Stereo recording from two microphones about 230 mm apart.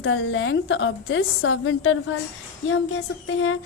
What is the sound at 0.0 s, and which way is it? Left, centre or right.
A woman's voice, left.